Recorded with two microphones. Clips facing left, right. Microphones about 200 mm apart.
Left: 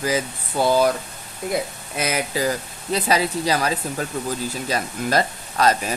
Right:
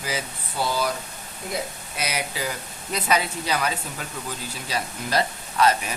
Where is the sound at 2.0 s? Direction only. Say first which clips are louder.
Left 6 dB; 50° left (ahead or behind).